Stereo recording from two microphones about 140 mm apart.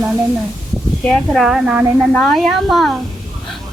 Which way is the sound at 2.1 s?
5° left (ahead or behind).